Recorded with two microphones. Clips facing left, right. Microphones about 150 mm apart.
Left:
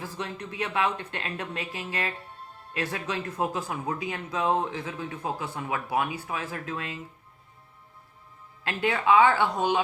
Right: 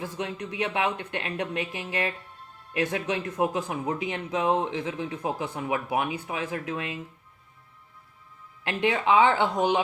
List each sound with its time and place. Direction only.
0.0 s a man's voice: 15° right (ahead or behind)
8.6 s a man's voice: 20° right (ahead or behind)